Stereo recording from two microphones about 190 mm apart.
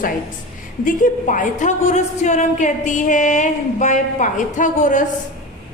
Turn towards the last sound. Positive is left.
turn(degrees=40)  # may be behind; listen again after turning